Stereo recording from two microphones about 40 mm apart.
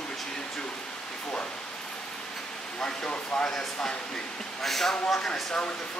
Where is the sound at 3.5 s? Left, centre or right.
Centre.